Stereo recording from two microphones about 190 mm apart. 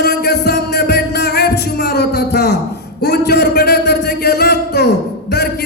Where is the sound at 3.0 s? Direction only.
60° left (ahead or behind).